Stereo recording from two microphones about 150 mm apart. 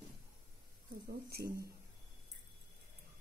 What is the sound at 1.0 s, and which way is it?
Speech, 90° right.